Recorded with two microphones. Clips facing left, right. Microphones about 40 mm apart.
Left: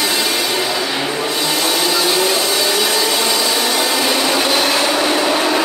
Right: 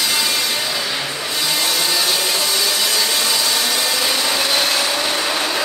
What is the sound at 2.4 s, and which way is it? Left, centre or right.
Vacuum cleaner, left.